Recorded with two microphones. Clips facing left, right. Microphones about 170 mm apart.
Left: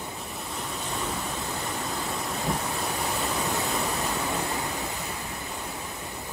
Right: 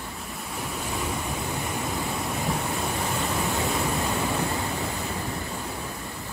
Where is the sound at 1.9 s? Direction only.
Centre (ahead or behind).